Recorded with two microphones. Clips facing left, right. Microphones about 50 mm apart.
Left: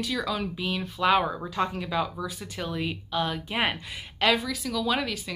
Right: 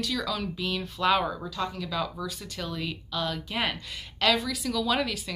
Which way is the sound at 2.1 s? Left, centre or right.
Centre.